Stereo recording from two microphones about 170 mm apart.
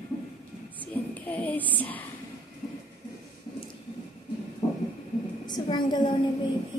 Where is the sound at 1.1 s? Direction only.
10° left (ahead or behind).